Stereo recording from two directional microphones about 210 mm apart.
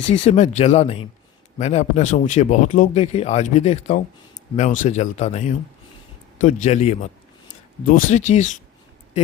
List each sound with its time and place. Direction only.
0.1 s speech: 35° left (ahead or behind)